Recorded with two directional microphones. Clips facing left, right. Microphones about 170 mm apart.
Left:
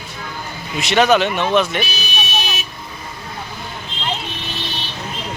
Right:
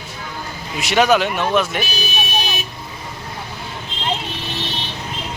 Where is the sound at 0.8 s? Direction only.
10° right (ahead or behind).